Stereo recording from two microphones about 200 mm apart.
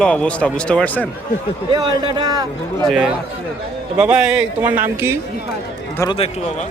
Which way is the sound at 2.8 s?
5° right (ahead or behind).